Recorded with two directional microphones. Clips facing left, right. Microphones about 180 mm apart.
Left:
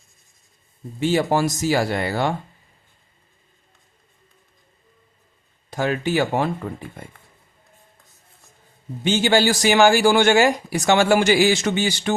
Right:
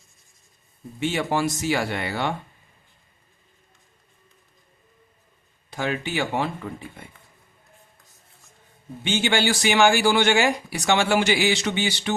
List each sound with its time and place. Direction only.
0.9 s speech: 40° left (ahead or behind)
5.7 s speech: 45° left (ahead or behind)
9.0 s speech: 40° left (ahead or behind)